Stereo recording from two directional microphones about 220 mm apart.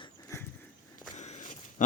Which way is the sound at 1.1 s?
30° left (ahead or behind).